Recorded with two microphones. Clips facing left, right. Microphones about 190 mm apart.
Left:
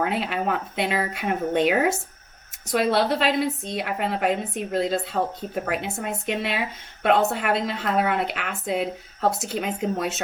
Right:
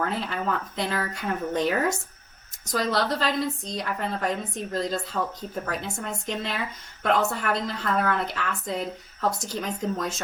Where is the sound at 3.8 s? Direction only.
70° left (ahead or behind).